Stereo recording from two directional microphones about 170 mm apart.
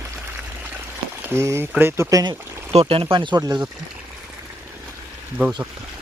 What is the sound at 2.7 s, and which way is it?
Speech, 35° right (ahead or behind).